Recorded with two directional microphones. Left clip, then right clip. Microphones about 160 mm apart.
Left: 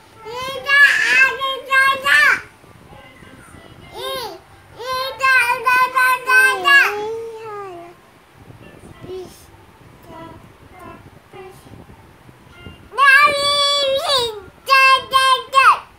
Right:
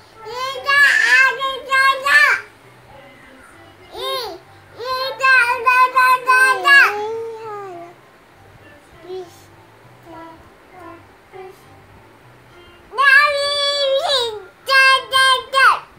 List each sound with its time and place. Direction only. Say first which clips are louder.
0.3 s child singing: left 1 dB; 5° right (ahead or behind)
3.9 s babbling: right 2 dB; 5° left (ahead or behind)
4.7 s child singing: right 1 dB; 15° left (ahead or behind)
7.0 s babbling: right 1 dB; 30° left (ahead or behind)
12.9 s child singing: left 1 dB; 40° left (ahead or behind)
13.9 s a sound: even; 35° left (ahead or behind)
14.7 s child singing: left 1 dB; 20° left (ahead or behind)